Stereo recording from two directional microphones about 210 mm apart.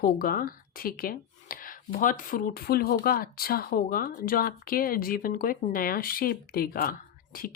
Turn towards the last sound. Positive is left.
turn(degrees=45)  # may be behind; listen again after turning